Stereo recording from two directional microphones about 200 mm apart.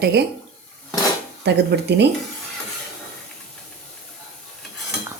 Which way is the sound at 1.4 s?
60° right (ahead or behind).